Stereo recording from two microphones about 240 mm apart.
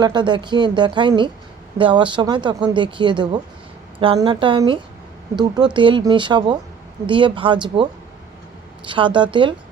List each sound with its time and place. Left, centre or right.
0.0 s speech: centre
8.9 s speech: centre